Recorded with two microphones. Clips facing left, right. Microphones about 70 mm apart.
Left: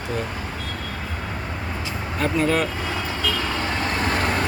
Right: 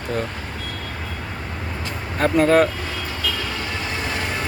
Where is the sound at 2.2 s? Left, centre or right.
Right.